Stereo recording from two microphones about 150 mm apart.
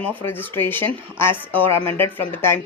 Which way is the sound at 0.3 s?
15° left (ahead or behind).